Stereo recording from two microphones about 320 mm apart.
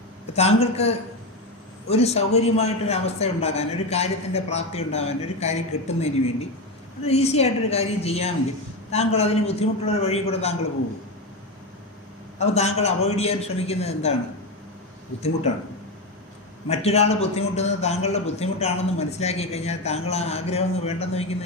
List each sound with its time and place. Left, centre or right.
0.3 s a man's voice: centre
12.4 s a man's voice: centre
16.6 s a man's voice: centre